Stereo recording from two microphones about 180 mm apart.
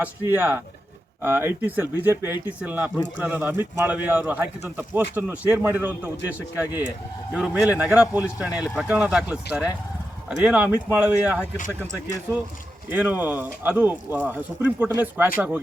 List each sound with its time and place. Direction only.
0.0 s speech: 10° right (ahead or behind)
12.9 s speech: 10° right (ahead or behind)